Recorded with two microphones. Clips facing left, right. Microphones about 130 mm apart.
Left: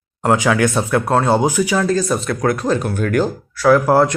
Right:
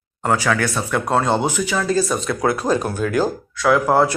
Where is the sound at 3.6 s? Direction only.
5° left (ahead or behind).